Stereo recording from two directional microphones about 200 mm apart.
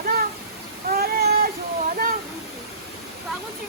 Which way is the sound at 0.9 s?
50° right (ahead or behind).